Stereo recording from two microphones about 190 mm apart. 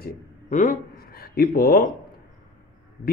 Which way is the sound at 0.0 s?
45° left (ahead or behind).